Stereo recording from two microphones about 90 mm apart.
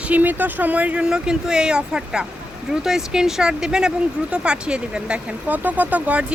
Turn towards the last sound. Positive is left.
turn(degrees=-15)  # may be behind; listen again after turning